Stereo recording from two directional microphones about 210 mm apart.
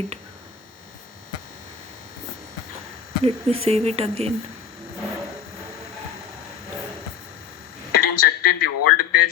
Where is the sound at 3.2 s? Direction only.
30° right (ahead or behind).